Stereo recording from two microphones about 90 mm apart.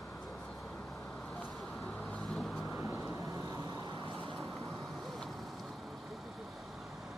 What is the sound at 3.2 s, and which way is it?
Vehicle, 40° right (ahead or behind).